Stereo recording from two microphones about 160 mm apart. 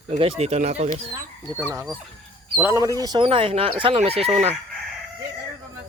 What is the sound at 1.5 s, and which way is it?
A man's voice, 15° right (ahead or behind).